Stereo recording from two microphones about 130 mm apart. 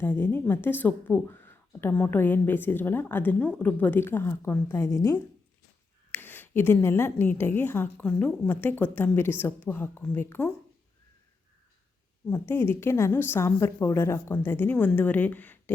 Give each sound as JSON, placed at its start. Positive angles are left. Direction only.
{"t": 0.0, "sound": "a woman's voice", "side_deg": 15}
{"t": 12.3, "sound": "speech", "side_deg": 15}